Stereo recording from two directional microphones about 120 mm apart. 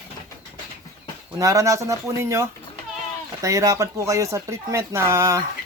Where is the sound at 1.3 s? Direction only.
30° right (ahead or behind).